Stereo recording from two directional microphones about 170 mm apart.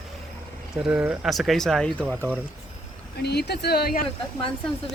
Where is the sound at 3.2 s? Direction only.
75° left (ahead or behind).